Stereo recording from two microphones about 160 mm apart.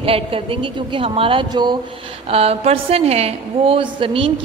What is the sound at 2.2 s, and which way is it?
A woman's voice, 40° right (ahead or behind).